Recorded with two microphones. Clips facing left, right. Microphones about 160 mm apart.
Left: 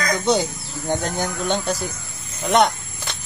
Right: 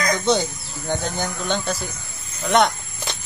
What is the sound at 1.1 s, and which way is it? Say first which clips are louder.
Speech: left 2 dB; 5° left (ahead or behind).